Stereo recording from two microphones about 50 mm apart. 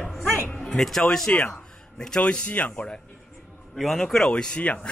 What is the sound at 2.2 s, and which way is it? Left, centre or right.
Speech, left.